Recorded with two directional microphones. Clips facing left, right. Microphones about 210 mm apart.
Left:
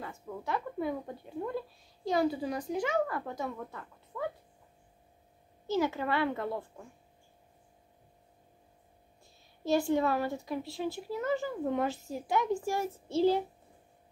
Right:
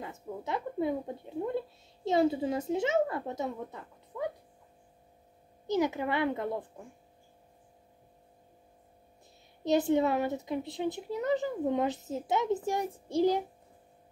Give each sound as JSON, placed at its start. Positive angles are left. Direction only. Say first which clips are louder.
{"t": 0.0, "sound": "a sound", "louder": "right 1 dB", "side_deg": -20}
{"t": 2.0, "sound": "speech", "louder": "right 3 dB", "side_deg": -25}
{"t": 5.7, "sound": "a woman's voice", "louder": "right 1 dB", "side_deg": -20}
{"t": 9.7, "sound": "speech", "louder": "right 2 dB", "side_deg": -20}